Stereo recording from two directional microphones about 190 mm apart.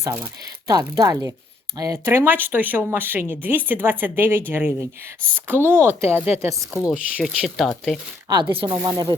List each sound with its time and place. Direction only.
0.0 s speech: 10° right (ahead or behind)
8.3 s speech: 25° right (ahead or behind)